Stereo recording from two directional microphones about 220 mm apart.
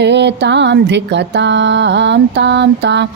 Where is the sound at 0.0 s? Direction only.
50° right (ahead or behind).